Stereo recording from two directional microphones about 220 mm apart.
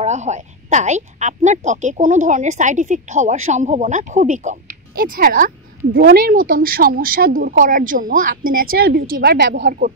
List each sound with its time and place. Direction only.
0.0 s a woman's voice: 30° right (ahead or behind)